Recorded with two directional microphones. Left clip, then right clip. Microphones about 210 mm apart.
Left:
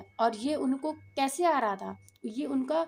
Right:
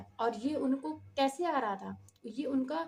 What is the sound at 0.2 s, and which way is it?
A woman's voice, 45° left (ahead or behind).